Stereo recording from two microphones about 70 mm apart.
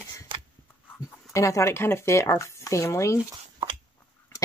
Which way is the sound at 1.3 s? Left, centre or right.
Left.